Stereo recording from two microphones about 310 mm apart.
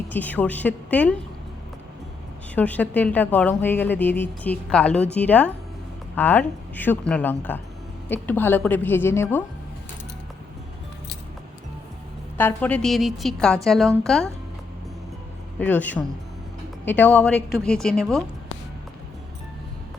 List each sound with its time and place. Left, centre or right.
0.1 s a woman's voice: centre
2.6 s a woman's voice: centre
12.4 s a woman's voice: centre
15.5 s a woman's voice: centre